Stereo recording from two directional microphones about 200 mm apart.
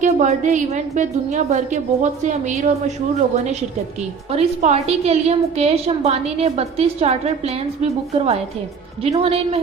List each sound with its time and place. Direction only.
0.0 s a woman's voice: 35° right (ahead or behind)